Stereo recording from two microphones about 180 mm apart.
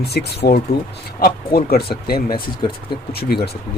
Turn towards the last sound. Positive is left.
turn(degrees=60)  # may be behind; listen again after turning